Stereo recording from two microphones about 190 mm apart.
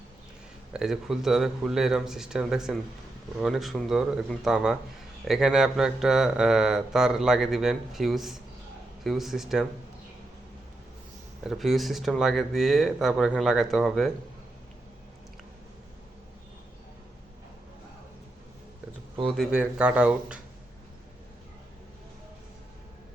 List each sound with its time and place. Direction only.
0.7 s speech: 5° right (ahead or behind)
11.4 s speech: centre (ahead or behind)
19.2 s speech: centre (ahead or behind)